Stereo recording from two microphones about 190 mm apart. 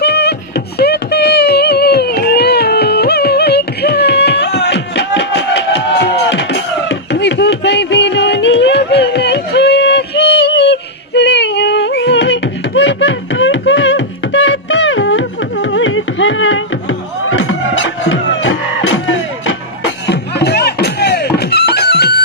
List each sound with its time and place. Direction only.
0.0 s music: 60° left (ahead or behind)